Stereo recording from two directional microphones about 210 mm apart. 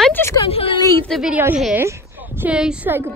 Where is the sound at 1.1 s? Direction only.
5° right (ahead or behind).